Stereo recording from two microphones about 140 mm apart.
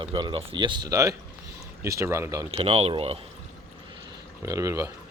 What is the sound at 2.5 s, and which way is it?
Speech, 45° right (ahead or behind).